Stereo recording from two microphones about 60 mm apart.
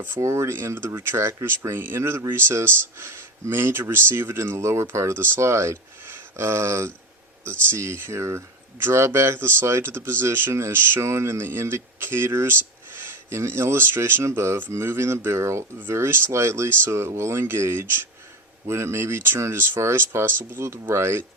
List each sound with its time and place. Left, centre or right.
0.2 s speech: right
1.7 s speech: right
14.3 s speech: right
15.8 s speech: right